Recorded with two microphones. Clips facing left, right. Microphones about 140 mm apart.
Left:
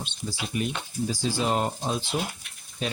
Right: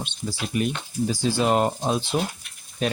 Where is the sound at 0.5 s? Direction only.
70° right (ahead or behind).